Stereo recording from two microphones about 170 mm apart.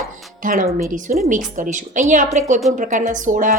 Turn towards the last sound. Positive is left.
turn(degrees=-50)  # may be behind; listen again after turning